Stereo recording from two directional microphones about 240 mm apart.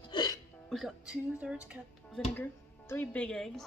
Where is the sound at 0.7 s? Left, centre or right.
Centre.